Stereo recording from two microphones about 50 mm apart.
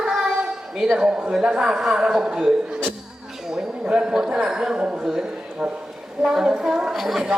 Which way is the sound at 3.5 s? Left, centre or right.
Centre.